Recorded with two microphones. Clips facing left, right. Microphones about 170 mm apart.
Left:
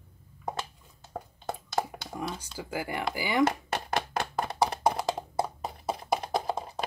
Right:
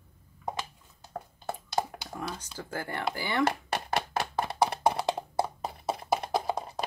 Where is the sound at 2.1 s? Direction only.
10° left (ahead or behind).